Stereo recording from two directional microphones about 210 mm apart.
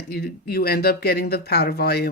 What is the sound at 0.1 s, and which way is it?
Speech, 50° left (ahead or behind).